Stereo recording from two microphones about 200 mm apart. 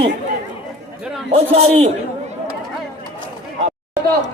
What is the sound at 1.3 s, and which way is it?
Speech, 30° right (ahead or behind).